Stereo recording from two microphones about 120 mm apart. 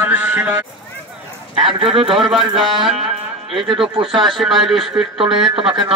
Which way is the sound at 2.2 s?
Centre (ahead or behind).